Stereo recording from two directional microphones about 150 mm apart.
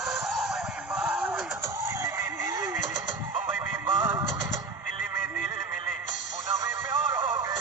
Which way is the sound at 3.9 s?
20° right (ahead or behind).